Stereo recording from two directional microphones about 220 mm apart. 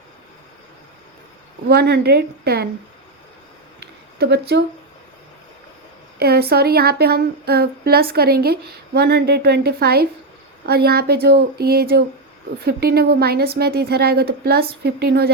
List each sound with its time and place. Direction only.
1.6 s a woman's voice: 45° right (ahead or behind)
4.2 s a woman's voice: 45° right (ahead or behind)
6.1 s a woman's voice: 45° right (ahead or behind)